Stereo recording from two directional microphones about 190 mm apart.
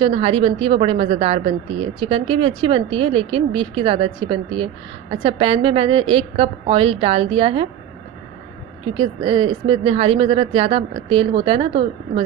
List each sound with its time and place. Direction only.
0.0 s a woman's voice: 30° right (ahead or behind)
8.9 s a woman's voice: 30° right (ahead or behind)